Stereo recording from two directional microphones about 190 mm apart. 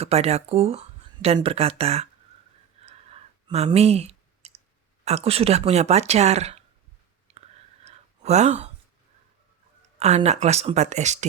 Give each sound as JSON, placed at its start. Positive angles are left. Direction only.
{"t": 0.0, "sound": "speech", "side_deg": -35}
{"t": 2.8, "sound": "clicking", "side_deg": -35}
{"t": 5.0, "sound": "speech", "side_deg": -35}
{"t": 7.9, "sound": "a sound", "side_deg": -35}
{"t": 10.0, "sound": "speech", "side_deg": -35}